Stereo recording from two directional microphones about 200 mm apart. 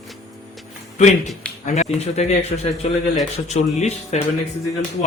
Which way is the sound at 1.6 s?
35° left (ahead or behind).